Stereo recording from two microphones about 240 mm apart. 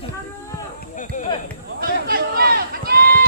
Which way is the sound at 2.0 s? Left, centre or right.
Right.